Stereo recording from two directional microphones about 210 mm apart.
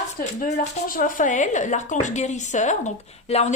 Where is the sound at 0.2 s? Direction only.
35° left (ahead or behind).